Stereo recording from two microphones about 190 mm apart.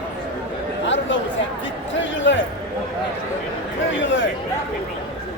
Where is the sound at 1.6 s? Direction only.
75° left (ahead or behind).